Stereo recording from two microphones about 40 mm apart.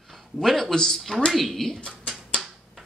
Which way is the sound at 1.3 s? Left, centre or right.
Centre.